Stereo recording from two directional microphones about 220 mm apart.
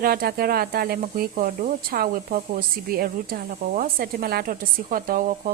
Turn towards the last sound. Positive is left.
turn(degrees=-40)  # may be behind; listen again after turning